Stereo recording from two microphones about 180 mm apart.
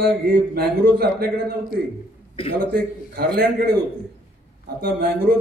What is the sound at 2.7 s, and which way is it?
A man's voice, 60° right (ahead or behind).